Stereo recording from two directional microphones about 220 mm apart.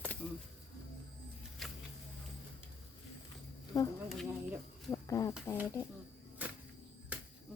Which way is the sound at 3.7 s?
15° left (ahead or behind).